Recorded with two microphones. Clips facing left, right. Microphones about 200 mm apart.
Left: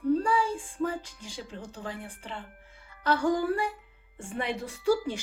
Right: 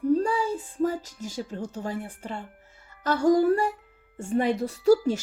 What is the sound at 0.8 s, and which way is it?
A woman's voice, 40° right (ahead or behind).